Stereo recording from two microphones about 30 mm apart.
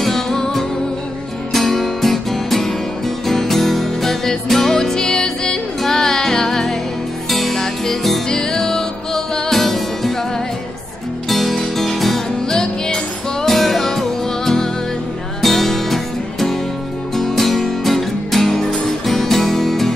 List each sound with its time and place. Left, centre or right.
0.0 s music: centre
7.2 s music: centre
7.5 s music: centre
11.2 s music: centre
12.4 s music: left
13.5 s music: centre